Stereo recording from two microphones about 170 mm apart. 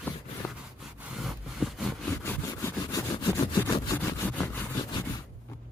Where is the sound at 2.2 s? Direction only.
20° left (ahead or behind).